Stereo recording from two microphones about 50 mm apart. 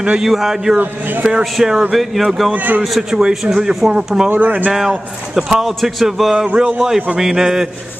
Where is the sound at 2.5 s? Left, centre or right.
Right.